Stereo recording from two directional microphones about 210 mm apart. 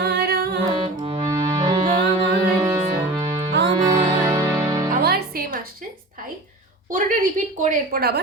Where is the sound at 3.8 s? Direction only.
15° right (ahead or behind).